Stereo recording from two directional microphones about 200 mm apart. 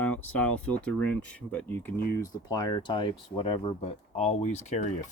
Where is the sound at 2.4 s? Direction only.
20° left (ahead or behind).